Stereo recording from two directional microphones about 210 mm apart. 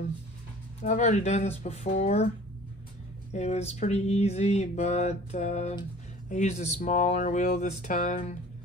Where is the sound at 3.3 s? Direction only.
30° left (ahead or behind).